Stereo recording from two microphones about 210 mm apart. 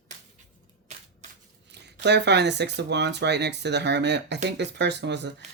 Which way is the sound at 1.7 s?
55° right (ahead or behind).